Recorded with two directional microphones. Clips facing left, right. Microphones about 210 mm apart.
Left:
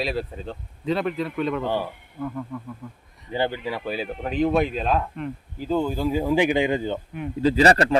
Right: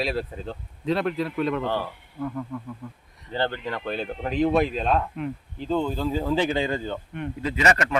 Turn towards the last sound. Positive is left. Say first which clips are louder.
# left 5 dB
turn(degrees=35)  # may be behind; listen again after turning